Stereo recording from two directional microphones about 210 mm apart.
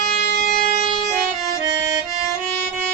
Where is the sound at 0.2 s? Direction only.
45° left (ahead or behind).